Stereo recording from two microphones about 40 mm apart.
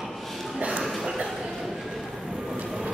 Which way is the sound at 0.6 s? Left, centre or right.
Right.